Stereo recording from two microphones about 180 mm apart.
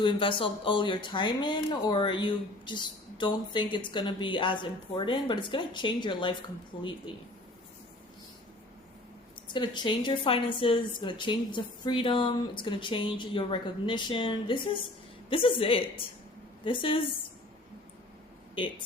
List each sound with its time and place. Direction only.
0.0 s a woman's voice: 25° left (ahead or behind)
9.5 s a woman's voice: 25° left (ahead or behind)